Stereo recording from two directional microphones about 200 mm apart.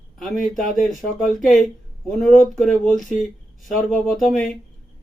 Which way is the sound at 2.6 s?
Centre (ahead or behind).